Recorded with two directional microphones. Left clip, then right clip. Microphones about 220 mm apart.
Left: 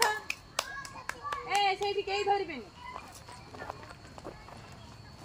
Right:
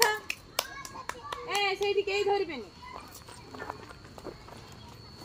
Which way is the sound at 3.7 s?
20° right (ahead or behind).